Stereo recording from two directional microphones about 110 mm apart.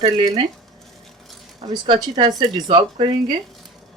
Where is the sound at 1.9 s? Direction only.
40° right (ahead or behind).